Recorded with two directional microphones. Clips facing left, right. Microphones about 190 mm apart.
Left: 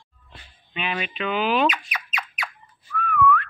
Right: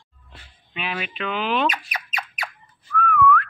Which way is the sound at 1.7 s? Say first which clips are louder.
Right 1 dB; 40° right (ahead or behind).